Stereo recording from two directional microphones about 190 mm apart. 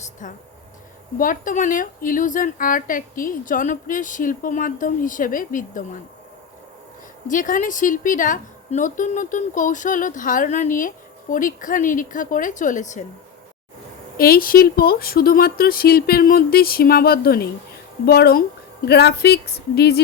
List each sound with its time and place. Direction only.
0.0 s a sound: 40° left (ahead or behind)
1.2 s a woman's voice: 45° left (ahead or behind)
7.3 s a woman's voice: 45° left (ahead or behind)
14.2 s a woman's voice: 50° left (ahead or behind)